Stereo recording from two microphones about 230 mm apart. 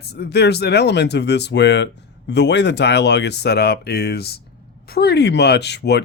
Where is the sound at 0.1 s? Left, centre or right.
Left.